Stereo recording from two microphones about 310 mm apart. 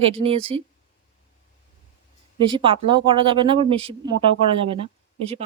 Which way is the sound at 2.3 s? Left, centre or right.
Centre.